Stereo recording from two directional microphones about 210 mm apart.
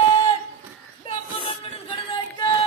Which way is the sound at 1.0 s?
25° left (ahead or behind).